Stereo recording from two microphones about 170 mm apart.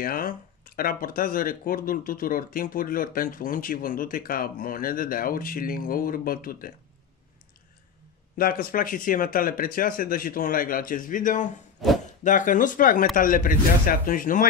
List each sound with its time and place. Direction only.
0.0 s speech: 55° left (ahead or behind)
8.4 s speech: 60° left (ahead or behind)